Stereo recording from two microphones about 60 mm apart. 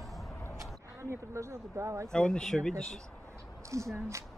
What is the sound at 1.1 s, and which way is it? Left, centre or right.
Speech, right.